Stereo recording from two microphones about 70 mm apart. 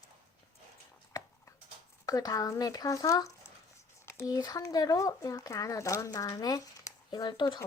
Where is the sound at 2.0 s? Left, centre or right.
Left.